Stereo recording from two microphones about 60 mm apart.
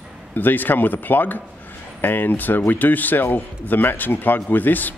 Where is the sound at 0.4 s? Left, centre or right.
Left.